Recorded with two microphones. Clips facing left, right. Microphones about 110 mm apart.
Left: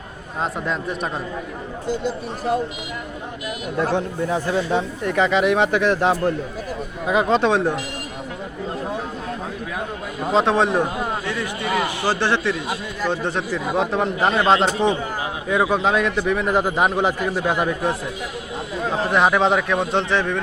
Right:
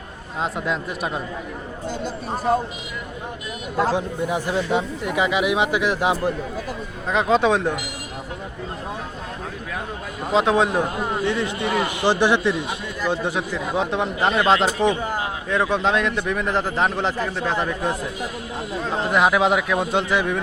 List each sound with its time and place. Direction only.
0.4 s a man's voice: centre (ahead or behind)
4.2 s a man's voice: 15° right (ahead or behind); by 7.8 s centre (ahead or behind)
10.2 s a man's voice: centre (ahead or behind)
11.3 s a man's voice: 20° right (ahead or behind); by 17.9 s 10° left (ahead or behind)
19.1 s a man's voice: 5° right (ahead or behind)